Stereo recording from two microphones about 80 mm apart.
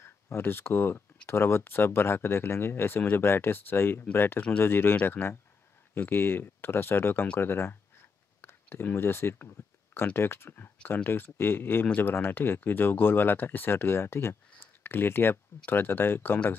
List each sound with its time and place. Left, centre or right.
0.0 s speech: left